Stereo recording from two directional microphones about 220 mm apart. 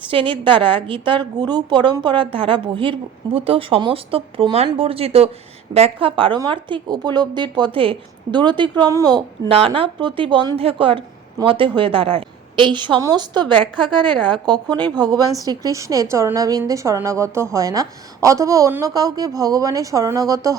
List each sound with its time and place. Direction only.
0.1 s a woman's voice: 25° right (ahead or behind)